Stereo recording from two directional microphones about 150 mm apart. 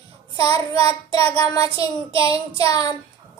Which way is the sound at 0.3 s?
25° left (ahead or behind).